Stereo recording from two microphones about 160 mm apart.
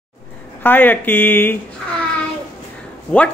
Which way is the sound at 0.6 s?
10° left (ahead or behind).